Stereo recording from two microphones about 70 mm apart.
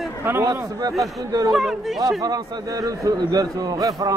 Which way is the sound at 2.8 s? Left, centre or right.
Right.